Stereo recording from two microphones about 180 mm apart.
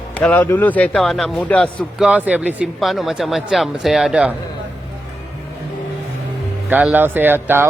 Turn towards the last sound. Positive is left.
turn(degrees=-10)  # may be behind; listen again after turning